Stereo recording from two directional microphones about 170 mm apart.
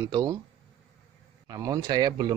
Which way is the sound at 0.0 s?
25° right (ahead or behind).